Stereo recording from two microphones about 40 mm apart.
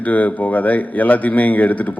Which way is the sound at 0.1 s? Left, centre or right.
Left.